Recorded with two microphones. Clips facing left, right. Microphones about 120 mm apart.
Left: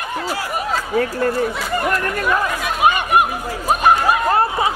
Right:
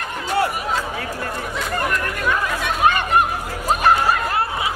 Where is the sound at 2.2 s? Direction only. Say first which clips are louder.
Even; 10° left (ahead or behind).